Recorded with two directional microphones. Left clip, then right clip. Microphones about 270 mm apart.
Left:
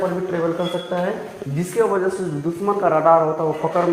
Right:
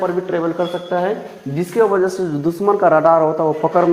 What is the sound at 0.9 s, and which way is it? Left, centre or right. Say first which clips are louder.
Speech: right 5 dB; right.